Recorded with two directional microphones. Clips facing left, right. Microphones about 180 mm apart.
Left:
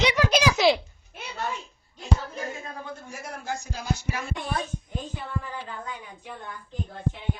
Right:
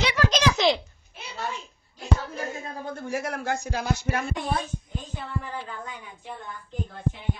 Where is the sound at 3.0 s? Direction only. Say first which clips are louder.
Right 9 dB; 80° right; by 4.3 s 65° right (ahead or behind).